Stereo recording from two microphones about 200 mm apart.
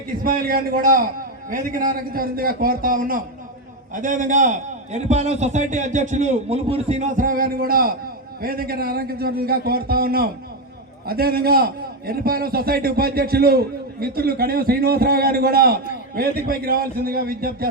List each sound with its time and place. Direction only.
0.2 s a man's voice: 45° right (ahead or behind)